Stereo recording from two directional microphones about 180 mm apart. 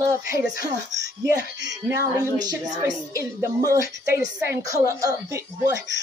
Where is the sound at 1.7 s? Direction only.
20° right (ahead or behind).